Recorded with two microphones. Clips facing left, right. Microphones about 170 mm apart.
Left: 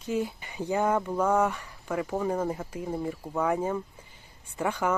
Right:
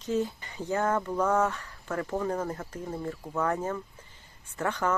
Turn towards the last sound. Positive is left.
turn(degrees=10)  # may be behind; listen again after turning